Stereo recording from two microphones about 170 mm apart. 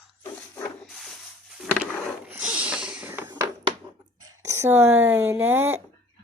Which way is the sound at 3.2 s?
25° right (ahead or behind).